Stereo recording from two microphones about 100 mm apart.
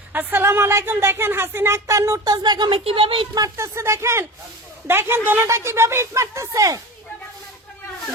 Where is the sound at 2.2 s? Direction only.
40° right (ahead or behind).